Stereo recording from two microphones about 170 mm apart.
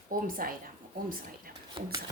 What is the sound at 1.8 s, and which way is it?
Speech, 30° right (ahead or behind).